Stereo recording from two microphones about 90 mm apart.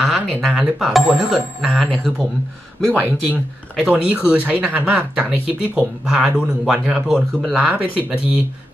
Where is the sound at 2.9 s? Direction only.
20° right (ahead or behind).